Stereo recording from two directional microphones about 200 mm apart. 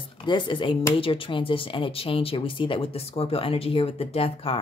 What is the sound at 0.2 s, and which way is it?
Speech, 25° left (ahead or behind).